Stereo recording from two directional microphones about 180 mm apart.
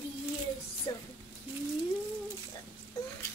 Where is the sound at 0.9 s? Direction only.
20° left (ahead or behind).